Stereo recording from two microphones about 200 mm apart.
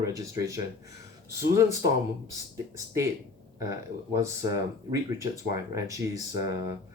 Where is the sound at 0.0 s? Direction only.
15° right (ahead or behind).